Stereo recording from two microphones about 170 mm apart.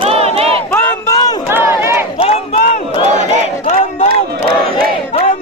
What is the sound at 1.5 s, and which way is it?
Crowd, 15° right (ahead or behind).